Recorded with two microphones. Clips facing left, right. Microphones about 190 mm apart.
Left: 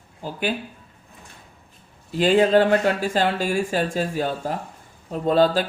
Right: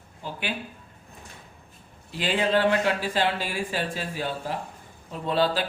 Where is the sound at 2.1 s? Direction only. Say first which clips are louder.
Left 8 dB; 45° left (ahead or behind).